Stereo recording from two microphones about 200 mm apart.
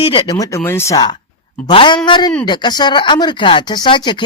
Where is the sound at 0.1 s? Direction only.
20° left (ahead or behind).